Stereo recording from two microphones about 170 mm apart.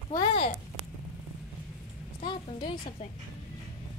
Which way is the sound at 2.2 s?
30° left (ahead or behind).